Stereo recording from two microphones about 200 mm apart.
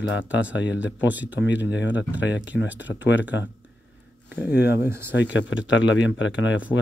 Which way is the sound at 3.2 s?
10° right (ahead or behind).